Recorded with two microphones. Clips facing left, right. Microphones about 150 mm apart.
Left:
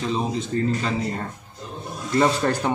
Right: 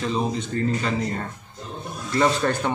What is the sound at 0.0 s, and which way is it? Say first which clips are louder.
Speech: even; centre (ahead or behind).